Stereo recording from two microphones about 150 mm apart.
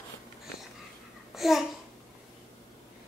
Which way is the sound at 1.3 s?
Centre (ahead or behind).